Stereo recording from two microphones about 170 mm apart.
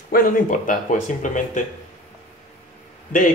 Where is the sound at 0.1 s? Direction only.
55° left (ahead or behind).